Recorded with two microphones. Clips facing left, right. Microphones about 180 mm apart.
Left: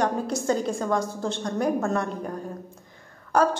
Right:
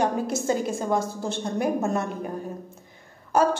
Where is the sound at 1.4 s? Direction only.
25° right (ahead or behind).